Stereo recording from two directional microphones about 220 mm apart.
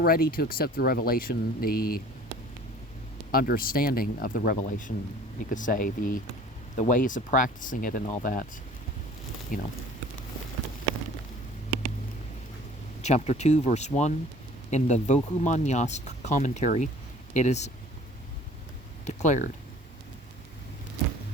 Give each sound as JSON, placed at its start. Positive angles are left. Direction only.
{"t": 0.0, "sound": "speech", "side_deg": 40}
{"t": 3.3, "sound": "speech", "side_deg": 40}
{"t": 9.5, "sound": "speech", "side_deg": 35}
{"t": 13.0, "sound": "speech", "side_deg": 30}
{"t": 19.0, "sound": "a sound", "side_deg": 35}